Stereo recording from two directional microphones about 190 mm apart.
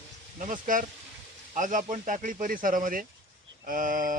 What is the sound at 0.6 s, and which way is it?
Speech, 45° right (ahead or behind).